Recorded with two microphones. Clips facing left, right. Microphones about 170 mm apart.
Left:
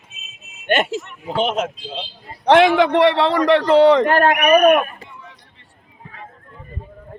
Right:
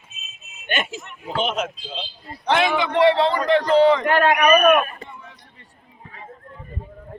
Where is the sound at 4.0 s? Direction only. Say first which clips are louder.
Left 4 dB; 40° left (ahead or behind).